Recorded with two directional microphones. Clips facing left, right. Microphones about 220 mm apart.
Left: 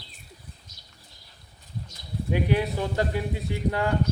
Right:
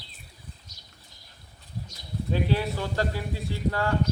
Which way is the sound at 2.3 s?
15° left (ahead or behind).